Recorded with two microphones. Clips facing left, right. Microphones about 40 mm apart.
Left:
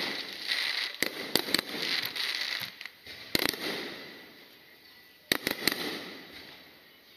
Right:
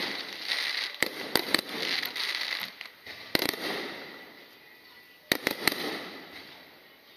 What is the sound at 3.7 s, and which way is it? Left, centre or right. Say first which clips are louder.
Fireworks: right 2 dB; right.